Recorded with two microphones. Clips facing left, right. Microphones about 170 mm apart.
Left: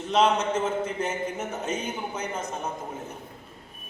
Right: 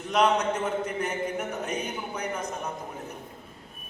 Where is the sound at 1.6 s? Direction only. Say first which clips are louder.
Left 2 dB; 25° left (ahead or behind).